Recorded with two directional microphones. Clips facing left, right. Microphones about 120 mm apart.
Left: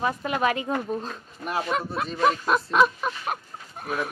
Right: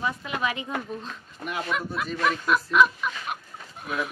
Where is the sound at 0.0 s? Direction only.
50° left (ahead or behind).